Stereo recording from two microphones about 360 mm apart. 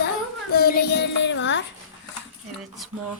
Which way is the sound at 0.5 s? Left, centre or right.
Left.